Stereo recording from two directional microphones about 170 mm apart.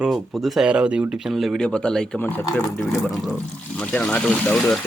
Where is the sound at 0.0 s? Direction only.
Centre (ahead or behind).